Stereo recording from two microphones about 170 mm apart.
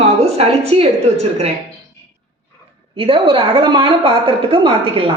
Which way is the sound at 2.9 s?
30° right (ahead or behind).